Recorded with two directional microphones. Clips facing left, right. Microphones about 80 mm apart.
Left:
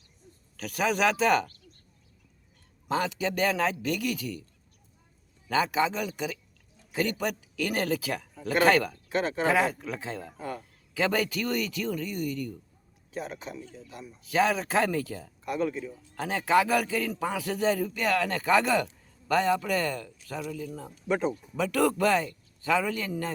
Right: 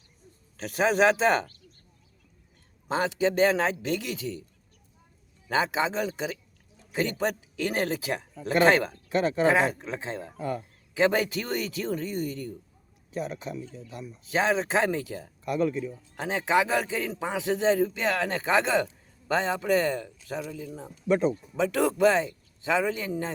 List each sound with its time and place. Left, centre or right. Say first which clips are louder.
0.5 s a man's voice: right 3 dB; right
2.9 s a man's voice: right 3 dB; right
5.5 s a man's voice: even; right
14.3 s a man's voice: even; right